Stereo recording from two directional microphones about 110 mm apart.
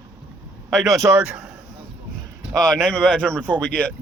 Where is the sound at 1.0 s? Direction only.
20° right (ahead or behind).